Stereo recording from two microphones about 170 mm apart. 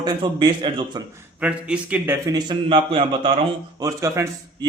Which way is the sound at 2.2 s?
25° right (ahead or behind).